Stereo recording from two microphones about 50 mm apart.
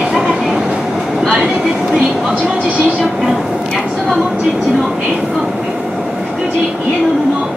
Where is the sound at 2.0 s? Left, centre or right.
Centre.